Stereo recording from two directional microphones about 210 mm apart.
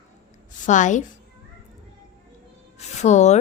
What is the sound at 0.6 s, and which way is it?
Speech, 35° left (ahead or behind).